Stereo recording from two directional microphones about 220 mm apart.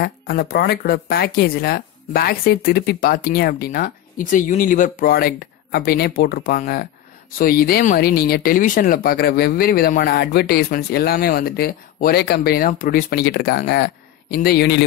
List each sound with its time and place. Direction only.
0.0 s speech: 45° left (ahead or behind)